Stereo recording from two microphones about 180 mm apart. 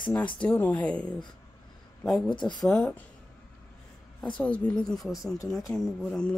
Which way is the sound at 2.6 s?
5° left (ahead or behind).